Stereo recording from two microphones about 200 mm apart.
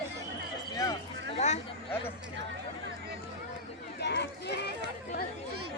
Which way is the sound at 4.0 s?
55° left (ahead or behind).